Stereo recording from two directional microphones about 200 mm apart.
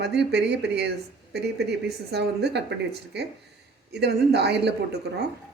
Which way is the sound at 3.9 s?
55° right (ahead or behind).